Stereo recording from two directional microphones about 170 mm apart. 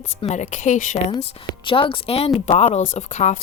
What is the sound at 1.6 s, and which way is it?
A woman's voice, 30° left (ahead or behind).